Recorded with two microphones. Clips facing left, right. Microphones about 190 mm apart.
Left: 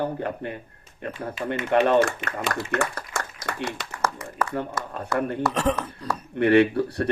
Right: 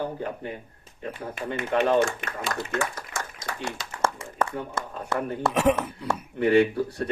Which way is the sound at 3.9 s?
25° right (ahead or behind).